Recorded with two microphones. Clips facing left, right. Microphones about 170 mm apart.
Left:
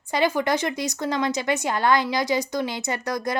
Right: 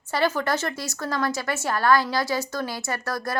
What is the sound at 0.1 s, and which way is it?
A woman's voice, 15° left (ahead or behind).